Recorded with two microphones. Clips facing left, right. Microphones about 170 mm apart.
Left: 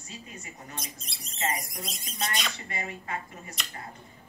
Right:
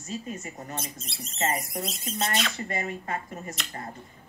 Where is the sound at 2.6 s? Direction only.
45° right (ahead or behind).